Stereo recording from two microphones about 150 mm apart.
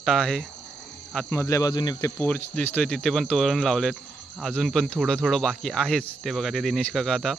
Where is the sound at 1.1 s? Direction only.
10° left (ahead or behind).